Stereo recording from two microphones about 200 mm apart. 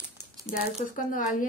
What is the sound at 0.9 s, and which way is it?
Speech, 45° left (ahead or behind).